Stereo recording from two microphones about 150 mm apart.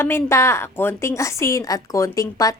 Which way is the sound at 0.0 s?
15° left (ahead or behind).